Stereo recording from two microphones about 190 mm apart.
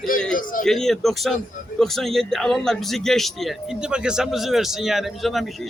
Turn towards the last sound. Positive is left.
turn(degrees=0)  # may be behind; listen again after turning